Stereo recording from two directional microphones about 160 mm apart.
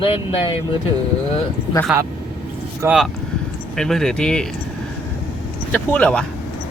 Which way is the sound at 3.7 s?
5° left (ahead or behind).